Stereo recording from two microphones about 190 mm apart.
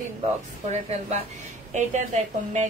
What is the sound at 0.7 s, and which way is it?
A woman's voice, 35° right (ahead or behind).